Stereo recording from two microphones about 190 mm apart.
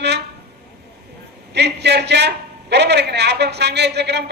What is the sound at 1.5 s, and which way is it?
A man's voice, 65° right (ahead or behind).